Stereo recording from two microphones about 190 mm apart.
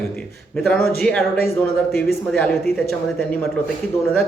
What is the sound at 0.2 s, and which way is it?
Speech, 5° left (ahead or behind).